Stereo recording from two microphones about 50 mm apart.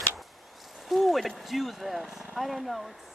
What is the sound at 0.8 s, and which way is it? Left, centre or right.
Speech, centre.